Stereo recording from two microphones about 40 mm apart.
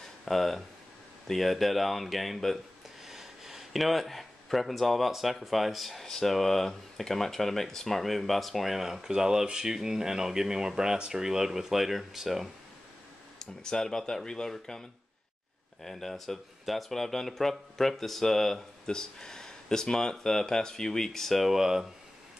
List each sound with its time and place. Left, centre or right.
0.2 s speech: centre
13.4 s speech: centre
18.9 s speech: centre
21.5 s speech: centre